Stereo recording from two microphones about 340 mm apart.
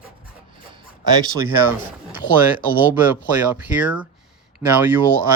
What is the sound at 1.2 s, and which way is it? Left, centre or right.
Speech, centre.